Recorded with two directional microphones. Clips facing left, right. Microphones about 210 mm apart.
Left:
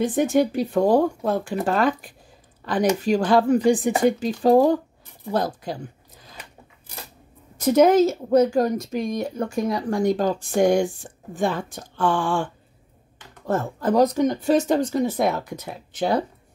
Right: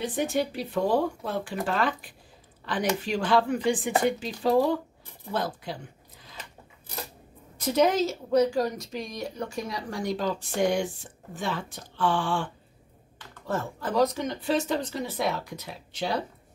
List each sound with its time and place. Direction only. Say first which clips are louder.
0.0 s a woman's voice: left 8 dB; 50° left (ahead or behind)
7.5 s a woman's voice: left 8 dB; 45° left (ahead or behind)
13.5 s a woman's voice: left 8 dB; 45° left (ahead or behind)